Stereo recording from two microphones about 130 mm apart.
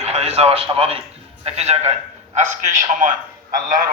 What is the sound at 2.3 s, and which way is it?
Speech, 65° right (ahead or behind).